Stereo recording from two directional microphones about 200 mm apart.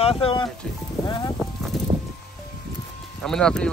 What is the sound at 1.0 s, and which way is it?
Music, 20° left (ahead or behind).